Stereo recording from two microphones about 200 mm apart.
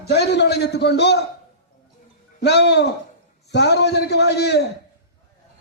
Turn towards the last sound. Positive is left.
turn(degrees=55)  # may be behind; listen again after turning